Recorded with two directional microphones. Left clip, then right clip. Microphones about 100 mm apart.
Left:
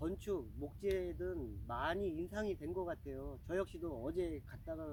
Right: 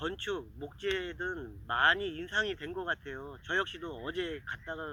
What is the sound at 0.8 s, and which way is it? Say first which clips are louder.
Speech: right 5 dB; 35° left (ahead or behind).